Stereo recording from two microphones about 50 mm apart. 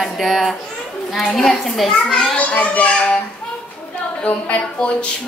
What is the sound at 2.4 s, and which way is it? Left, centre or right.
Speech, left.